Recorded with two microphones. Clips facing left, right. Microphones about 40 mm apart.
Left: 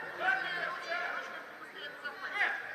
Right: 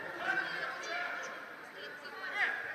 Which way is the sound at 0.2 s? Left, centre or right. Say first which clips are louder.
Left 3 dB; centre.